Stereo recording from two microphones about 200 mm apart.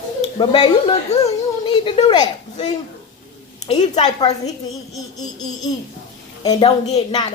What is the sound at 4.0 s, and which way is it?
A woman's voice, 20° left (ahead or behind).